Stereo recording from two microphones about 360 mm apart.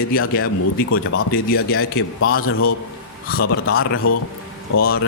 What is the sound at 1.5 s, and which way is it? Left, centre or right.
Speech, left.